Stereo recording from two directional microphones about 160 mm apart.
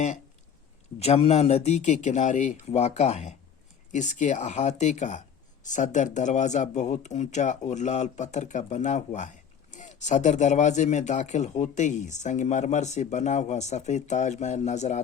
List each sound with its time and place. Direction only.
0.9 s speech: 40° left (ahead or behind)